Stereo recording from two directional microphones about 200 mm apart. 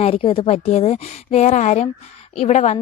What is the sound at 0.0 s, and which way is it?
A woman's voice, 25° left (ahead or behind).